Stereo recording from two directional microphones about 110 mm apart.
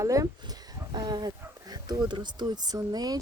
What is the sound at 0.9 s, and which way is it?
Speech, 40° right (ahead or behind).